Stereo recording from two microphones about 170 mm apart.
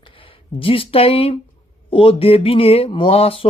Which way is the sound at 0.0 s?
30° left (ahead or behind).